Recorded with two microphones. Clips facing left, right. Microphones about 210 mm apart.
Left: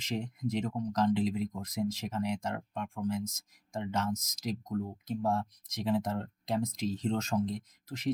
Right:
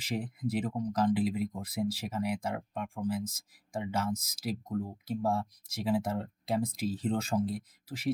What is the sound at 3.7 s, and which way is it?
Speech, 10° right (ahead or behind).